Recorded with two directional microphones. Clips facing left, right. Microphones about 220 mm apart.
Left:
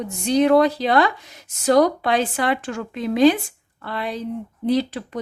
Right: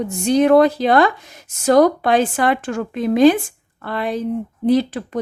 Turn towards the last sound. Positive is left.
turn(degrees=-50)  # may be behind; listen again after turning